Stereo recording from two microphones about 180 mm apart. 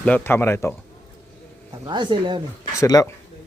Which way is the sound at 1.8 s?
25° right (ahead or behind).